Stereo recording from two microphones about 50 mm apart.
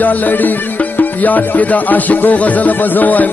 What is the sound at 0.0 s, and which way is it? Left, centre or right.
Music, left.